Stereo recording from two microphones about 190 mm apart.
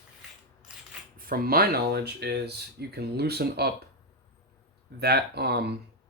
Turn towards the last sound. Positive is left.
turn(degrees=-60)  # may be behind; listen again after turning